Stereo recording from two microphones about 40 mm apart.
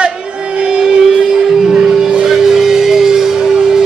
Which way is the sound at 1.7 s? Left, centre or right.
Centre.